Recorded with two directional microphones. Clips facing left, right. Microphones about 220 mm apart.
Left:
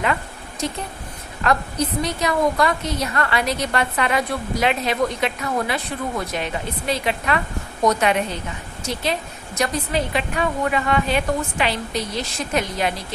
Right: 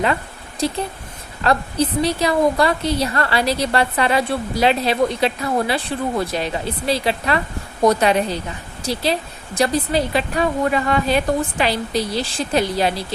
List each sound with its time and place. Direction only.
0.6 s a woman's voice: 30° right (ahead or behind)